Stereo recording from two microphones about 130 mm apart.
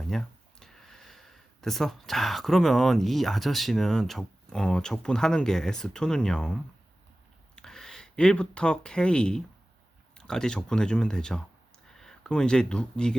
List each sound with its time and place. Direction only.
0.1 s speech: 5° left (ahead or behind)